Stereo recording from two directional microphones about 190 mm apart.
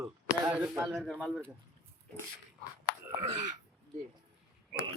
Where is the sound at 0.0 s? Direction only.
10° right (ahead or behind).